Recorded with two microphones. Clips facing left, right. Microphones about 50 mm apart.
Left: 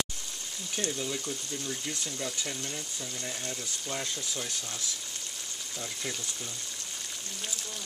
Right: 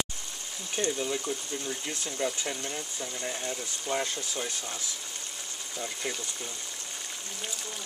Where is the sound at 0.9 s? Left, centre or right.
Centre.